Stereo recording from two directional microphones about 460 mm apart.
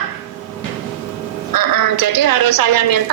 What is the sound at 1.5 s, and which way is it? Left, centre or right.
A woman's voice, right.